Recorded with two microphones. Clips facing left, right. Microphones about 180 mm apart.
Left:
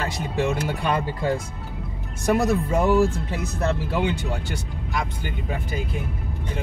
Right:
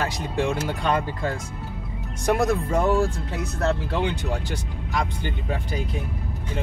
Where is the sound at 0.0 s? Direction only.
Centre (ahead or behind).